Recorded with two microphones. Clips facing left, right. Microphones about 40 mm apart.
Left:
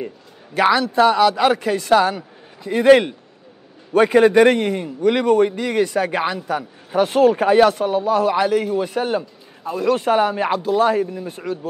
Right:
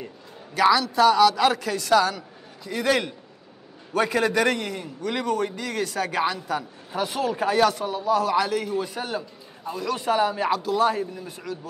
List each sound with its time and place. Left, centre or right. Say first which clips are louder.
0.6 s a man's voice: left 3 dB; left